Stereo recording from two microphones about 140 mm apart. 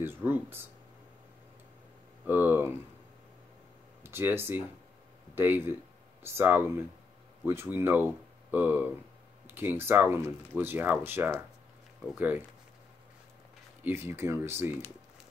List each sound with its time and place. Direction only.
0.0 s speech: 15° right (ahead or behind)
2.2 s speech: 15° right (ahead or behind)
4.0 s speech: 15° right (ahead or behind)
13.8 s speech: 15° right (ahead or behind)